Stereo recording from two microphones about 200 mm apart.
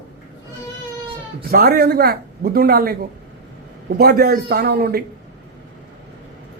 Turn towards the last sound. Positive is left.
turn(degrees=-50)  # may be behind; listen again after turning